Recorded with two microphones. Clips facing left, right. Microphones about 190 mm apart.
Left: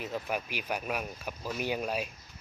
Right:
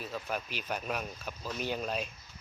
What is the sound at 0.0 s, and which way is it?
Speech, 15° left (ahead or behind).